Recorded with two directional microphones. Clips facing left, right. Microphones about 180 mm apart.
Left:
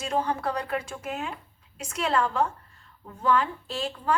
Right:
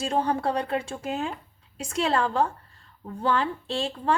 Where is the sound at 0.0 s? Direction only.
30° right (ahead or behind).